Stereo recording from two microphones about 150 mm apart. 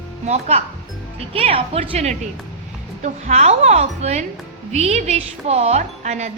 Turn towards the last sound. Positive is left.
turn(degrees=-50)  # may be behind; listen again after turning